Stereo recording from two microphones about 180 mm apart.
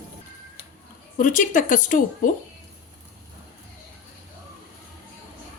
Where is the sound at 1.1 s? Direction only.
45° left (ahead or behind).